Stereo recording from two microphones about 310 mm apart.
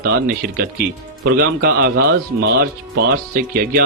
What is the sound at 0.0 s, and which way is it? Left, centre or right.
Speech, right.